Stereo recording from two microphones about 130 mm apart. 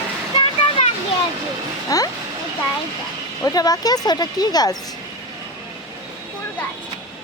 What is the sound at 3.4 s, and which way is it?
A woman's voice, 30° left (ahead or behind).